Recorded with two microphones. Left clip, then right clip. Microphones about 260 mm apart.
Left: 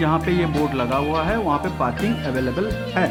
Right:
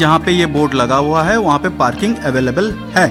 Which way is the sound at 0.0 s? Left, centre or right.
Right.